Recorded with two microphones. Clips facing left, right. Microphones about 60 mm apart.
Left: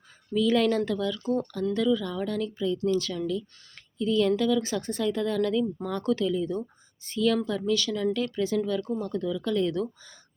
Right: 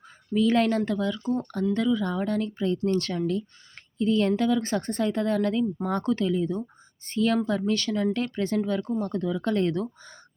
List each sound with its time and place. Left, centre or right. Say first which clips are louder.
0.3 s speech: right 1 dB; right